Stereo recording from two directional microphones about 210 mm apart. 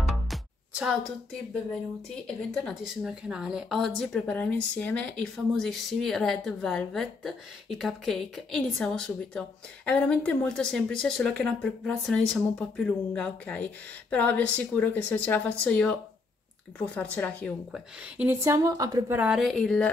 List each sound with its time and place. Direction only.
0.1 s music: centre (ahead or behind)
2.2 s a woman's voice: centre (ahead or behind)
18.1 s speech: 10° right (ahead or behind)